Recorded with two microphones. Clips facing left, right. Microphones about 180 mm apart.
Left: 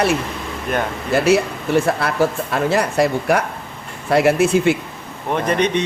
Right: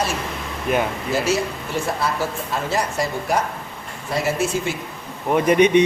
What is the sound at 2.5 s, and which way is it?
Speech, 60° left (ahead or behind).